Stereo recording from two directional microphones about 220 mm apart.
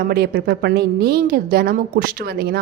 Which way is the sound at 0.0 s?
45° right (ahead or behind).